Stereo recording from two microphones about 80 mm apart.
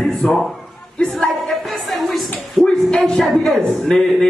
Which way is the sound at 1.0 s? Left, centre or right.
Centre.